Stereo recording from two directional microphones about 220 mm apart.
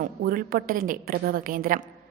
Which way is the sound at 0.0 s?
40° right (ahead or behind).